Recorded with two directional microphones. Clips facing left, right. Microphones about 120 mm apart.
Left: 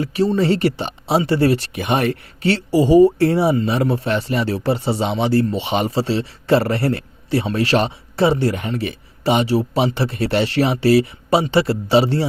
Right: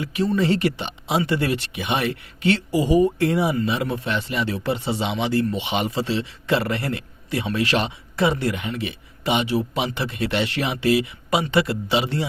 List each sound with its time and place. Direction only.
0.0 s speech: 35° left (ahead or behind)